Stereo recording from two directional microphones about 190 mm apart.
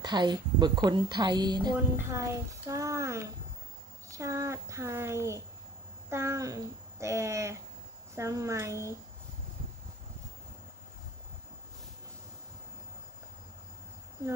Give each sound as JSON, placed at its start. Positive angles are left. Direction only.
{"t": 0.0, "sound": "a woman's voice", "side_deg": -25}